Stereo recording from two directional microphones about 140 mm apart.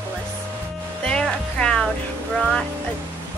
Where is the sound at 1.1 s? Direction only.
5° left (ahead or behind).